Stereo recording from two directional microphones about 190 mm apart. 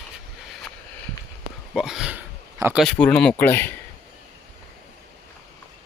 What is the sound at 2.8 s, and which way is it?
Speech, 5° left (ahead or behind).